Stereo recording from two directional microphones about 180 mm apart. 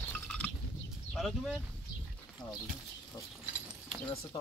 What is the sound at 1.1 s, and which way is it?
Speech, centre (ahead or behind).